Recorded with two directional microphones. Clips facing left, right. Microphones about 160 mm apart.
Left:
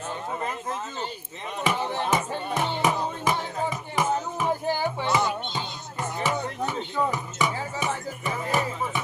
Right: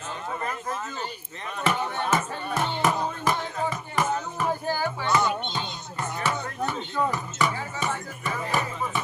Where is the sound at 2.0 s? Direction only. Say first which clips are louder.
Left 1 dB; 15° left (ahead or behind).